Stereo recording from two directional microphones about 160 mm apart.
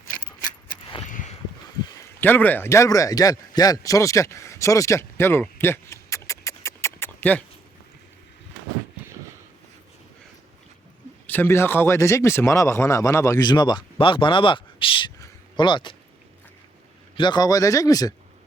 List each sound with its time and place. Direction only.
1.8 s a sound: 25° left (ahead or behind)
2.2 s a man's voice: 10° left (ahead or behind)
11.3 s a man's voice: 15° left (ahead or behind); by 16.0 s 30° left (ahead or behind)
17.2 s a man's voice: 30° left (ahead or behind)